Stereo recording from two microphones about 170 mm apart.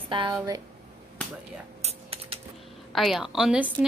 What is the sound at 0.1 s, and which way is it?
Speech, 25° right (ahead or behind).